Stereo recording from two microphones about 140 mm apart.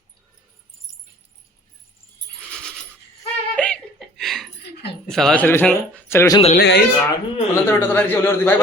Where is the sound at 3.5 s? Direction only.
10° left (ahead or behind).